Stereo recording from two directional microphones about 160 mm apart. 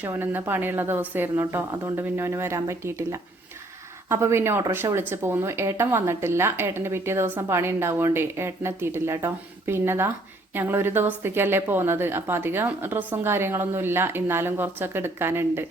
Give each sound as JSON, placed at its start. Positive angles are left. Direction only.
{"t": 0.0, "sound": "speech", "side_deg": -15}